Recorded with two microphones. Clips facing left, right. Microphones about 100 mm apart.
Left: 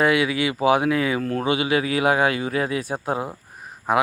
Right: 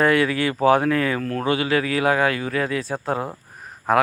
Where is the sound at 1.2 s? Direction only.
25° left (ahead or behind).